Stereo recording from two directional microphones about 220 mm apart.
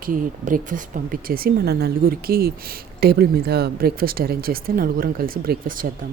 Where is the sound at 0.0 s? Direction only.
40° right (ahead or behind).